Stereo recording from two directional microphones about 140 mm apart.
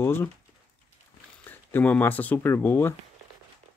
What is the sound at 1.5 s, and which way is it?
Speech, 10° left (ahead or behind).